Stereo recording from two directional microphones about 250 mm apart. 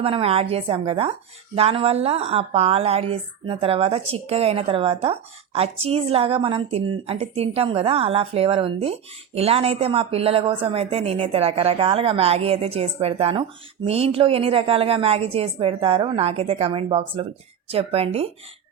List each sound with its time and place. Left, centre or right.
0.0 s speech: right